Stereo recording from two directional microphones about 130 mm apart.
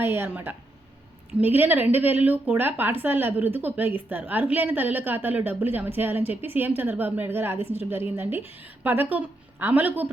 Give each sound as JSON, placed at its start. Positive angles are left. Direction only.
{"t": 0.0, "sound": "speech", "side_deg": -15}